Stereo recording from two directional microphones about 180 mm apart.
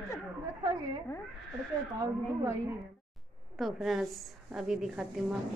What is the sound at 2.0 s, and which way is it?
Speech, 20° right (ahead or behind).